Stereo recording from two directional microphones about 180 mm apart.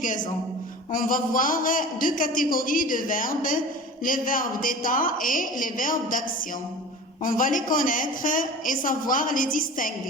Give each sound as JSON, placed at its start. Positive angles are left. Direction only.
{"t": 0.0, "sound": "a woman's voice", "side_deg": 45}